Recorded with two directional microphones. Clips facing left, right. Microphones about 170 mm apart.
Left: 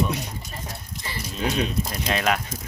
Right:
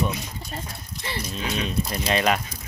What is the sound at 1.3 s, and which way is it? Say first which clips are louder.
Speech: left 5 dB; 45° left (ahead or behind).